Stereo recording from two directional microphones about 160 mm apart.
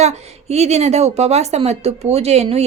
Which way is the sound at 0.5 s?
40° right (ahead or behind).